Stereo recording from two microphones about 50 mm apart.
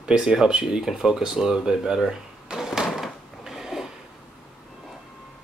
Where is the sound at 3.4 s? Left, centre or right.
Centre.